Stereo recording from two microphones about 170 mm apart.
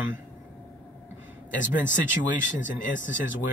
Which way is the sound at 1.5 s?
50° left (ahead or behind).